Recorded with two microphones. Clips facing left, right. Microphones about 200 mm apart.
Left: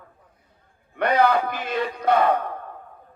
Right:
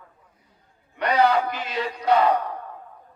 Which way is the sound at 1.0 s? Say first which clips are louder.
Left 1 dB; 55° left (ahead or behind).